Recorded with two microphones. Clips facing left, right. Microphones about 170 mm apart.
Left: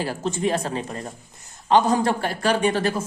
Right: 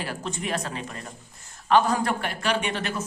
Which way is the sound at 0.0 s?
30° left (ahead or behind).